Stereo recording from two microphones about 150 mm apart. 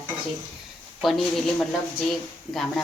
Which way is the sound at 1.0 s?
Centre (ahead or behind).